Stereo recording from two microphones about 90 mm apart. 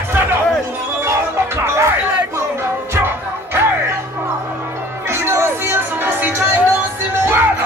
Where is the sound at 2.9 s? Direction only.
25° right (ahead or behind).